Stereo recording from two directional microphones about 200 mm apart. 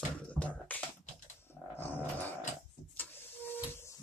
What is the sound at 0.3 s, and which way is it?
Finger snapping, 5° left (ahead or behind).